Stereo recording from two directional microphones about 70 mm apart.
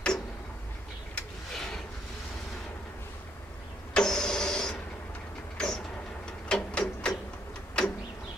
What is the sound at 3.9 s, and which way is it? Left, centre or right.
Vehicle, centre.